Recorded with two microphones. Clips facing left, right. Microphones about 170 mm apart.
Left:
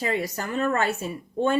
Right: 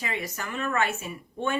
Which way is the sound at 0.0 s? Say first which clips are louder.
Left 6 dB; 35° left (ahead or behind).